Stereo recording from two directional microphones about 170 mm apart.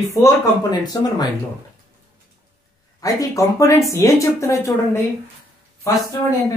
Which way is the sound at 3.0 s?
20° left (ahead or behind).